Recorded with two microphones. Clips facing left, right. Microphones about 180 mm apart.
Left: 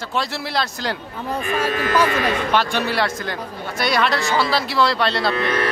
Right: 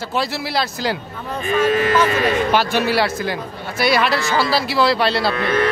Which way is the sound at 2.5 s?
5° right (ahead or behind).